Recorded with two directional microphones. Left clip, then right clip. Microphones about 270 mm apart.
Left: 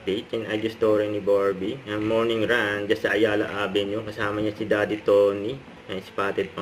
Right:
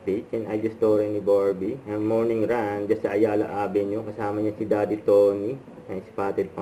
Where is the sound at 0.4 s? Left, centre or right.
Left.